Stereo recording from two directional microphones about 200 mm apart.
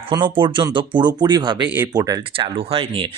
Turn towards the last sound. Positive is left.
turn(degrees=-25)  # may be behind; listen again after turning